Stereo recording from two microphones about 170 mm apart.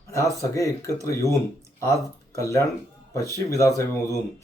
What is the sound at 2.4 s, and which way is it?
Speech, 15° left (ahead or behind).